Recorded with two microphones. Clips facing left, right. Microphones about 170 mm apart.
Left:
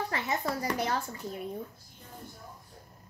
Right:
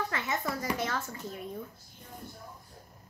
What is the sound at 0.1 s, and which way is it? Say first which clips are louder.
Speech: left 2 dB; 35° left (ahead or behind).